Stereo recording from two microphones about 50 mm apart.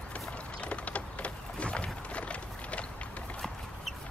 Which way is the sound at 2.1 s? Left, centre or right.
Left.